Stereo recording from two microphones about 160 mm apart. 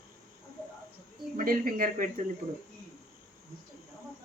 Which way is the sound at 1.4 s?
60° right (ahead or behind).